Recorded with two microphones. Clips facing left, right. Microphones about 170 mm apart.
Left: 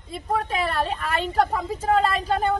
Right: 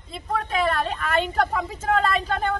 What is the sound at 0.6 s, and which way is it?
Speech, 5° left (ahead or behind).